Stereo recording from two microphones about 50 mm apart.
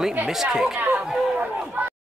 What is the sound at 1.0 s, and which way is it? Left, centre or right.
Speech, centre.